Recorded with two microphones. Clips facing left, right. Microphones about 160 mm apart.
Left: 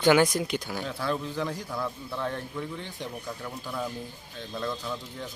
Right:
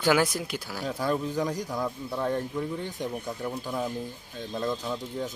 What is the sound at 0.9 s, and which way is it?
Speech, 15° right (ahead or behind).